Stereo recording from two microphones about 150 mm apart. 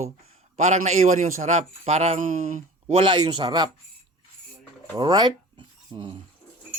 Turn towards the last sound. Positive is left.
turn(degrees=-35)  # may be behind; listen again after turning